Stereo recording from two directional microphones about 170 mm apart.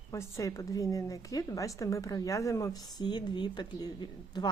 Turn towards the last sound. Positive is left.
turn(degrees=25)  # may be behind; listen again after turning